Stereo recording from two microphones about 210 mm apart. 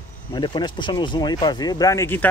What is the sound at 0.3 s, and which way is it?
Speech, 20° left (ahead or behind).